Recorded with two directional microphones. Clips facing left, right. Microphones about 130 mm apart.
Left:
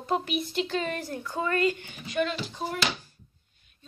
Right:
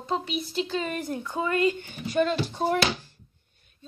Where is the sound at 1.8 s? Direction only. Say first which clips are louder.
Right 4 dB; 35° right (ahead or behind).